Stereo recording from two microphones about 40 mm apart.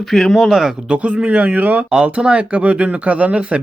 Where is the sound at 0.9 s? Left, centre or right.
Right.